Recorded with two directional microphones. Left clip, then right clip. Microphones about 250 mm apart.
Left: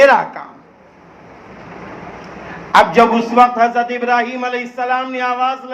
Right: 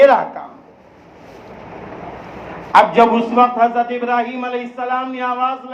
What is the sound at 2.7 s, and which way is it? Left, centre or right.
A man's voice, left.